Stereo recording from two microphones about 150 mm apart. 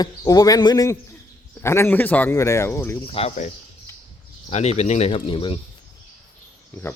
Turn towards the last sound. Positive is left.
turn(degrees=40)  # may be behind; listen again after turning